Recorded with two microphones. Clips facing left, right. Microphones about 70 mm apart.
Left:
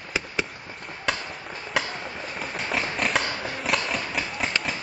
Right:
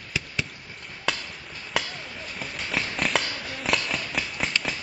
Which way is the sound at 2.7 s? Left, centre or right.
Centre.